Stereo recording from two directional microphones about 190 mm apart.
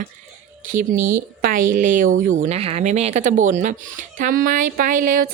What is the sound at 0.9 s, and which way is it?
Speech, 15° right (ahead or behind).